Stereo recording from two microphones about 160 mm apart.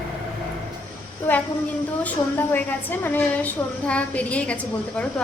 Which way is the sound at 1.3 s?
10° left (ahead or behind).